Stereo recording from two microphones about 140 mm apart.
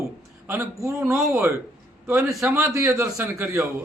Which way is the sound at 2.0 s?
20° right (ahead or behind).